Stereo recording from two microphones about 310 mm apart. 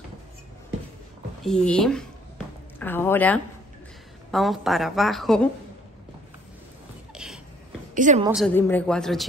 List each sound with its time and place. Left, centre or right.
1.4 s a woman's voice: centre
7.9 s a woman's voice: right
8.3 s a woman's voice: centre